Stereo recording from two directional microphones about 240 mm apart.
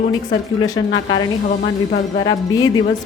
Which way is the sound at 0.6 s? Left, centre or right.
Centre.